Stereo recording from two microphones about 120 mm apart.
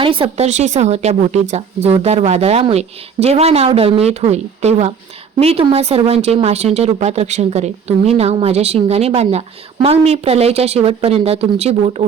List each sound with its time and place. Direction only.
0.0 s speech: 50° right (ahead or behind)
0.4 s a woman's voice: 75° right (ahead or behind); by 12.0 s 60° right (ahead or behind)